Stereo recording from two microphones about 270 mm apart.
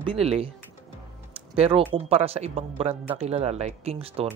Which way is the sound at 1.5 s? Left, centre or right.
Right.